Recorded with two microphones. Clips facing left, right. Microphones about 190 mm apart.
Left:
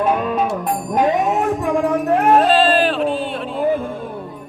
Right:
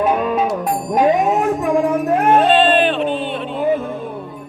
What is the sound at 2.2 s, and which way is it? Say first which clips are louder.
Music: right 1 dB; centre (ahead or behind).